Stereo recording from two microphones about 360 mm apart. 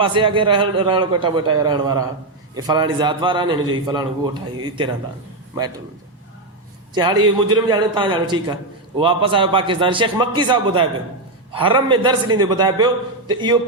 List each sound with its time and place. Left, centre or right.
0.0 s a man's voice: centre
6.9 s a man's voice: centre
7.2 s a man's voice: right
7.5 s a man's voice: centre